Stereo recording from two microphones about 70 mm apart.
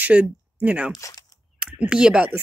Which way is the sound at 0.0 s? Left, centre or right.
Right.